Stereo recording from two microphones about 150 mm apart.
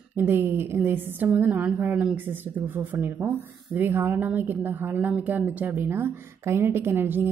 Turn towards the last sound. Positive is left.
turn(degrees=-15)  # may be behind; listen again after turning